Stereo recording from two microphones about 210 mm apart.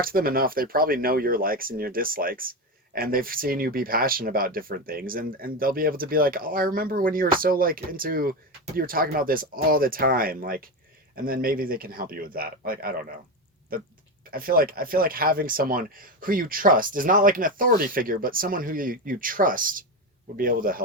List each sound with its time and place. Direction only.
0.0 s speech: 45° right (ahead or behind)
14.3 s speech: 45° right (ahead or behind)